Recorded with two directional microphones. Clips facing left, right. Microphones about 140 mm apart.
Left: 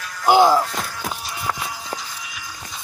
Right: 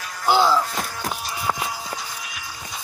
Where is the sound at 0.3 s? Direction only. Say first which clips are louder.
Left 4 dB; 50° left (ahead or behind).